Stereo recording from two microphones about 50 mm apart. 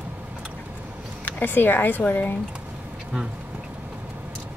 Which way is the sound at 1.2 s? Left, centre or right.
Left.